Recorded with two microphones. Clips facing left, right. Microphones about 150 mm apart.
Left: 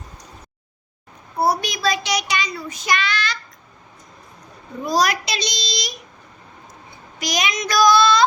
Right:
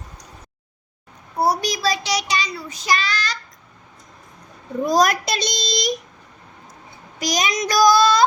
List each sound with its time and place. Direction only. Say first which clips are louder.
1.6 s child singing: even; 35° right (ahead or behind)
4.9 s a child's voice: right 2 dB; 50° right (ahead or behind)
7.2 s child singing: right 2 dB; 40° right (ahead or behind)